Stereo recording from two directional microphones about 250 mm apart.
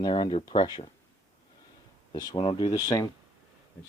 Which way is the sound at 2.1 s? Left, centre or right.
Centre.